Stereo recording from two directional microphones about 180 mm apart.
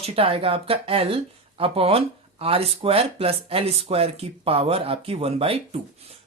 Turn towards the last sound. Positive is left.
turn(degrees=-30)  # may be behind; listen again after turning